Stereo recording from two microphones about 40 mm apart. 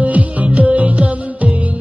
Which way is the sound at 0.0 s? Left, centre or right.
Right.